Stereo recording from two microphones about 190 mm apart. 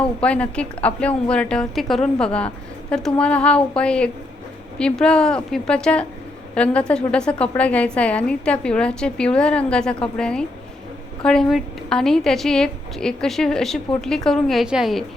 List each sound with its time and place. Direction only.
0.0 s a woman's voice: 5° left (ahead or behind)